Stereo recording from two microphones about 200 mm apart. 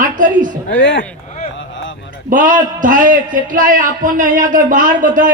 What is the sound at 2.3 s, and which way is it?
A man's voice, 40° right (ahead or behind).